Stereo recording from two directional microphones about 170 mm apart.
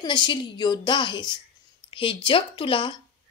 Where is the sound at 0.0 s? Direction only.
25° left (ahead or behind).